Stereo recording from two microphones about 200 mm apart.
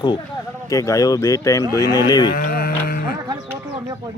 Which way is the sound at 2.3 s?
45° left (ahead or behind).